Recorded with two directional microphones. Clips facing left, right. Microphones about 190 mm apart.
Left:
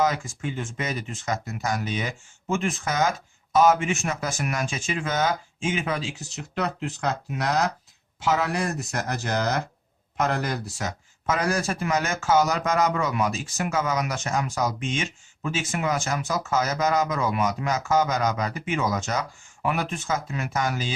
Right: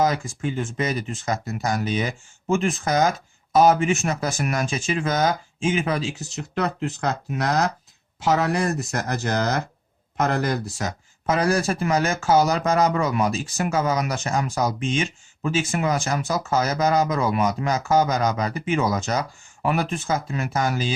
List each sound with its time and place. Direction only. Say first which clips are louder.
0.0 s speech: right 3 dB; 35° right (ahead or behind)